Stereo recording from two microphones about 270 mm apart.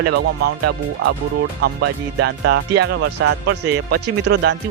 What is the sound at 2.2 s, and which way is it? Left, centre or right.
Speech, right.